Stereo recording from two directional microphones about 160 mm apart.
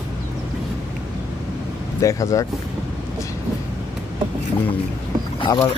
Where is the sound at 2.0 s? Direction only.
20° left (ahead or behind).